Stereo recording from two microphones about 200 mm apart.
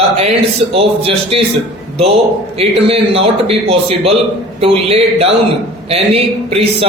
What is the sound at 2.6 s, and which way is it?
A man's voice, 30° right (ahead or behind).